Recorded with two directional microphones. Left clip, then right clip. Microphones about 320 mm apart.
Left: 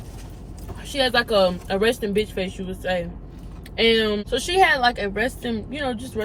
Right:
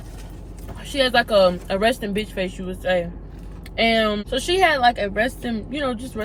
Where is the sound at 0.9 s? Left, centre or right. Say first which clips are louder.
Right 2 dB; centre.